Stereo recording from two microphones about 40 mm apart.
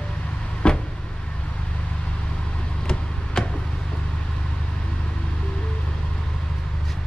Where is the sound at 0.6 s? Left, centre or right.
Left.